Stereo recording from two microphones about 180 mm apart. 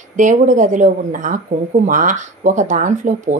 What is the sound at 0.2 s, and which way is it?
Speech, 45° right (ahead or behind).